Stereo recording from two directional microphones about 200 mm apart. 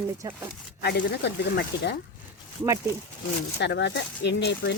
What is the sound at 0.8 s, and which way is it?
Speech, 55° left (ahead or behind).